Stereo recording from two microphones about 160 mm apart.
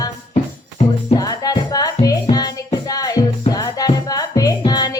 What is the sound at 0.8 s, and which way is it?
Music, 45° left (ahead or behind).